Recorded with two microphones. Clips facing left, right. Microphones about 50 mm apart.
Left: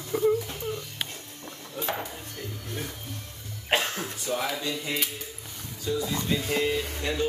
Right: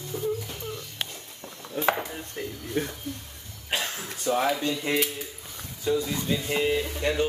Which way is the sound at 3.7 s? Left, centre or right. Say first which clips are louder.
Left 4 dB; left.